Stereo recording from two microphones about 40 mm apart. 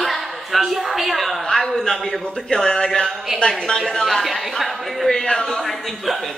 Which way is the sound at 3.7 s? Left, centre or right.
Left.